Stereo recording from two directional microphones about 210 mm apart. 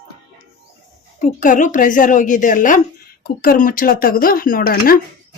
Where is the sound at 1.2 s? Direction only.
35° left (ahead or behind).